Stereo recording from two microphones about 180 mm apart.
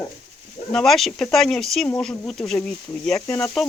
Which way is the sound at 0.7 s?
Centre (ahead or behind).